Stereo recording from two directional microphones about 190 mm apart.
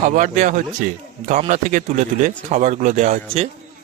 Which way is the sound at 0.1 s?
40° right (ahead or behind).